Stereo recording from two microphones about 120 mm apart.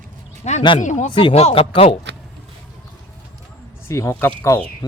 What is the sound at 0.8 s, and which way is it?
Speech, 90° left.